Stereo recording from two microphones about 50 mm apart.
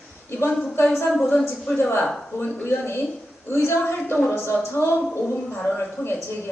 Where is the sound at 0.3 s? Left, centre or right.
Left.